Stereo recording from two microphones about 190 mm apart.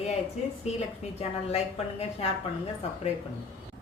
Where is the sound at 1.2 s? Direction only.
35° left (ahead or behind).